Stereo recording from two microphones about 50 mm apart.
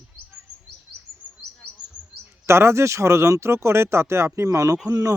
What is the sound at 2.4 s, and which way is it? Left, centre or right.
Speech, right.